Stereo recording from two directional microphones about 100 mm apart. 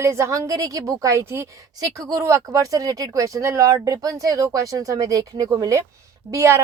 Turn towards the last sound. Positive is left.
turn(degrees=-25)  # may be behind; listen again after turning